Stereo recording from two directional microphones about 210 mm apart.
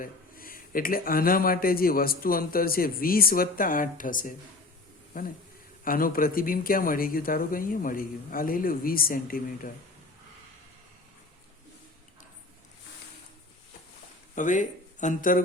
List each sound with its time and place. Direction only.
0.0 s speech: 40° left (ahead or behind)
14.3 s speech: 35° left (ahead or behind)